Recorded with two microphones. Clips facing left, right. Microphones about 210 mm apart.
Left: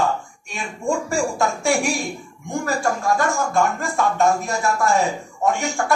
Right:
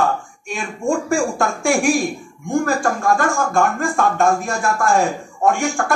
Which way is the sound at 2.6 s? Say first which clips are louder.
Left 1 dB; 50° right (ahead or behind).